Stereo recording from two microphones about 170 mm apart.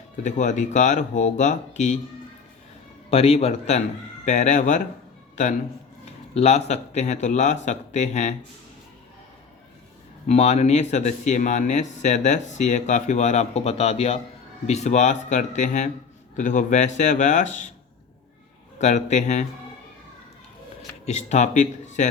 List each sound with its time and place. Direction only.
0.2 s speech: 45° left (ahead or behind)
3.1 s a man's voice: 35° left (ahead or behind)
6.3 s speech: 40° left (ahead or behind)
10.2 s speech: 40° left (ahead or behind)
18.8 s speech: 45° left (ahead or behind)
21.0 s speech: 40° left (ahead or behind)